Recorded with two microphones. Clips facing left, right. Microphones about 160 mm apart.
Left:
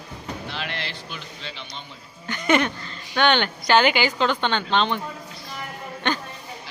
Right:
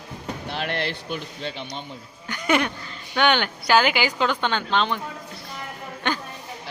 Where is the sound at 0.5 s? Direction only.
55° right (ahead or behind).